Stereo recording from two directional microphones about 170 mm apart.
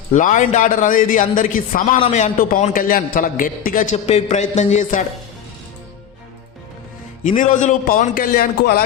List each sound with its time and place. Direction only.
0.1 s a man's voice: 50° left (ahead or behind)
2.0 s a man's voice: 40° left (ahead or behind)
7.3 s a man's voice: 50° left (ahead or behind)